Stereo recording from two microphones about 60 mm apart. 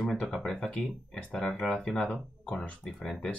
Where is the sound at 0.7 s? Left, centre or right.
Centre.